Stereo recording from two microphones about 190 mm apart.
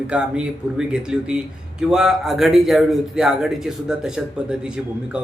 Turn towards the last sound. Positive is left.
turn(degrees=-5)  # may be behind; listen again after turning